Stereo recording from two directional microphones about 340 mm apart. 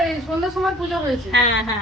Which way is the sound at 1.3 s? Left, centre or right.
Right.